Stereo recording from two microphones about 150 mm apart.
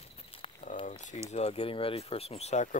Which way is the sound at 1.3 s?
45° left (ahead or behind).